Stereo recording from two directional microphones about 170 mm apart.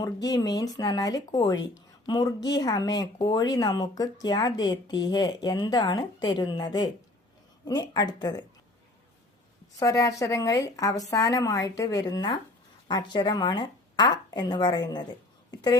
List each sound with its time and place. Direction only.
0.0 s speech: 25° left (ahead or behind)
9.7 s speech: 20° left (ahead or behind)